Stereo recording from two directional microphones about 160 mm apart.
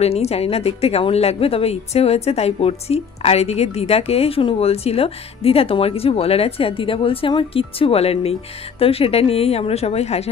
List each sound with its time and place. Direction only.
0.0 s a woman's voice: 40° left (ahead or behind)